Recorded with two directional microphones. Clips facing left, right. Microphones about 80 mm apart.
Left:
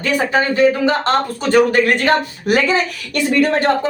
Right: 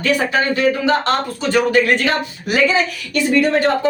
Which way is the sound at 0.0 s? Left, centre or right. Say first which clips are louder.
Even; left.